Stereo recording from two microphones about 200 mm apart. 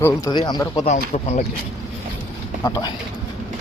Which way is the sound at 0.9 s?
35° left (ahead or behind).